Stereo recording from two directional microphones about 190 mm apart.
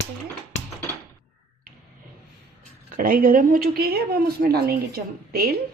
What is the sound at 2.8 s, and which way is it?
A woman's voice, 50° right (ahead or behind).